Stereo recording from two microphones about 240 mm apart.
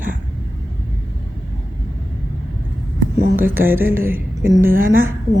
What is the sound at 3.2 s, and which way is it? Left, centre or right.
Speech, right.